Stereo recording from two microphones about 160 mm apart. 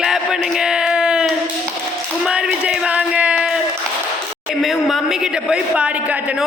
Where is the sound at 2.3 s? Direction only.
5° right (ahead or behind).